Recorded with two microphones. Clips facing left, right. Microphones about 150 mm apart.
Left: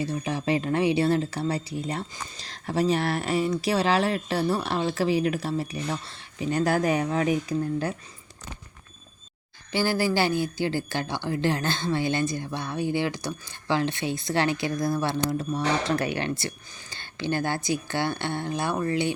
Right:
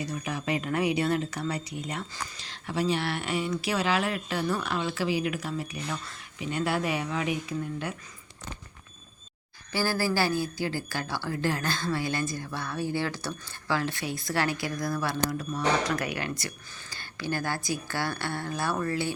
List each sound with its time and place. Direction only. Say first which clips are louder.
0.0 s speech: left 5 dB; 30° left (ahead or behind)
9.7 s speech: left 3 dB; 20° left (ahead or behind)